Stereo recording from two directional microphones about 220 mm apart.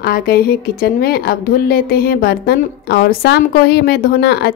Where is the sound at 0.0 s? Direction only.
45° left (ahead or behind).